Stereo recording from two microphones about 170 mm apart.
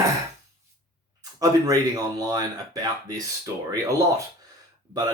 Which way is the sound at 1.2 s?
20° right (ahead or behind).